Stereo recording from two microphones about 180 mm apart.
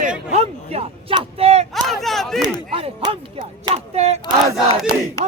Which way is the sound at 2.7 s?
30° right (ahead or behind).